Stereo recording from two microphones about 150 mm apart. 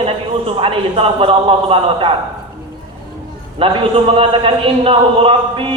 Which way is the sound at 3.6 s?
40° right (ahead or behind).